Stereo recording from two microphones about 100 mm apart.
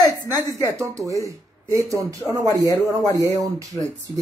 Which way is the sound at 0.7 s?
30° right (ahead or behind).